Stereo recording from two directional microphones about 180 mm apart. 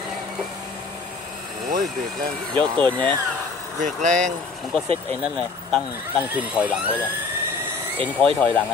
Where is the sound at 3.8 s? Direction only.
45° right (ahead or behind).